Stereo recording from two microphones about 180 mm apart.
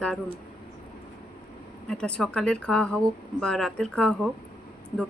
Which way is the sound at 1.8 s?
5° left (ahead or behind).